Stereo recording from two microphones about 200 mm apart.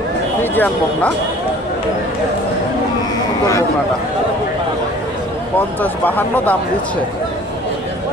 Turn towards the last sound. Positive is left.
turn(degrees=10)  # may be behind; listen again after turning